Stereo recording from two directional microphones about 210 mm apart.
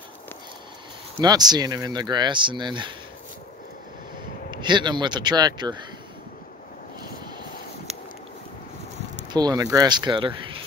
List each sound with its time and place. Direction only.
1.2 s speech: 20° right (ahead or behind)
4.5 s speech: 20° right (ahead or behind)
9.3 s speech: 20° right (ahead or behind)